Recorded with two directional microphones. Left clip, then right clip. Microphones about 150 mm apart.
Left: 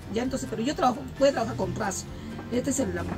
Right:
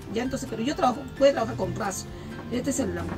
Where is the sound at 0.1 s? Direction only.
15° left (ahead or behind).